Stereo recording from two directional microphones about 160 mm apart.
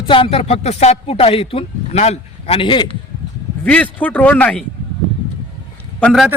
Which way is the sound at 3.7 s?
10° left (ahead or behind).